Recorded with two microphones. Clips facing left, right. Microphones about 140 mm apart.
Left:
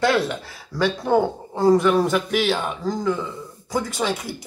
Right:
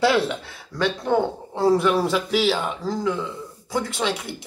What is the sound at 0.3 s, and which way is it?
Speech, centre (ahead or behind).